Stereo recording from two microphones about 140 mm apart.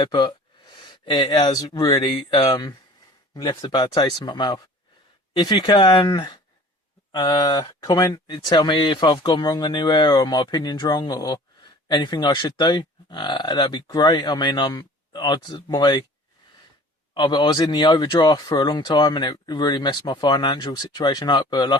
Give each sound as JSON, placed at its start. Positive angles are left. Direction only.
{"t": 0.0, "sound": "speech", "side_deg": 30}
{"t": 17.2, "sound": "speech", "side_deg": 30}